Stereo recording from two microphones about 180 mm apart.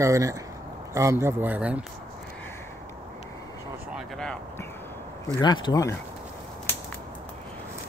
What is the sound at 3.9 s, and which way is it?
Speech, 5° left (ahead or behind).